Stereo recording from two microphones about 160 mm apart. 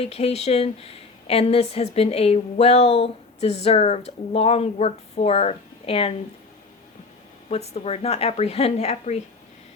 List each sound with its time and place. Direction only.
0.0 s a woman's voice: 40° left (ahead or behind)
7.5 s a woman's voice: 40° left (ahead or behind)